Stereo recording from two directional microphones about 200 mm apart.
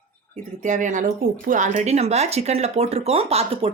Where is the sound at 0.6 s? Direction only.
40° right (ahead or behind).